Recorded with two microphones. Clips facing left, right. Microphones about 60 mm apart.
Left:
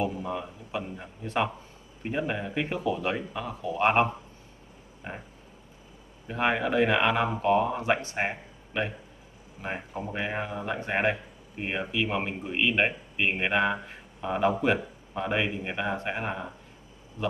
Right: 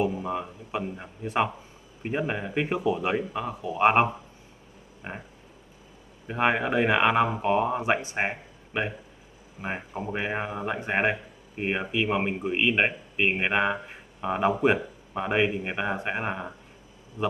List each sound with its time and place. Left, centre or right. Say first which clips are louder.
0.0 s speech: right 3 dB; centre
6.2 s speech: right 2 dB; centre